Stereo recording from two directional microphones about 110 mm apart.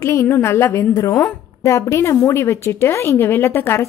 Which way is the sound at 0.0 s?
25° left (ahead or behind).